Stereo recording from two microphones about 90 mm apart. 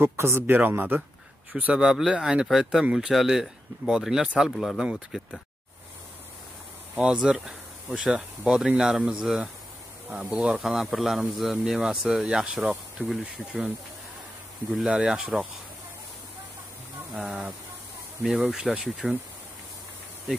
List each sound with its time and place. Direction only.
0.0 s speech: 25° right (ahead or behind); by 5.3 s 10° right (ahead or behind)
7.0 s speech: 10° right (ahead or behind)
14.7 s speech: 5° right (ahead or behind)
17.1 s speech: 5° right (ahead or behind)